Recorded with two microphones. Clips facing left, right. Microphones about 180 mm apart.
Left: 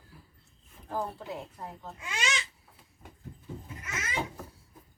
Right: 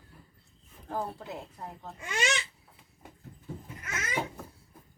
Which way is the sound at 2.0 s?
55° right (ahead or behind).